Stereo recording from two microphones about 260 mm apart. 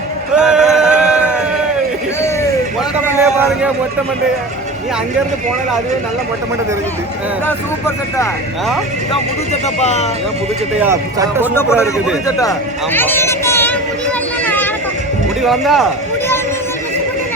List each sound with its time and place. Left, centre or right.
0.3 s music: centre
3.1 s vehicle: centre
7.4 s speech: centre
9.8 s speech: left
10.8 s speech: centre
12.4 s speech: centre
14.4 s vehicle: centre
15.4 s speech: centre